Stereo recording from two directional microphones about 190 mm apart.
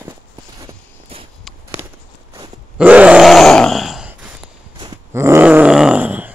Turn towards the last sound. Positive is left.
turn(degrees=-10)  # may be behind; listen again after turning